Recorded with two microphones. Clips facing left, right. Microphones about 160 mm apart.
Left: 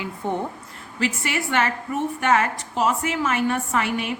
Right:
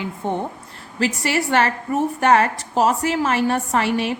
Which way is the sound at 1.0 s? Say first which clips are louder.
Right 4 dB; 35° right (ahead or behind).